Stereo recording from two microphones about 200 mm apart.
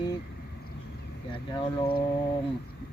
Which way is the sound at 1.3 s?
25° left (ahead or behind).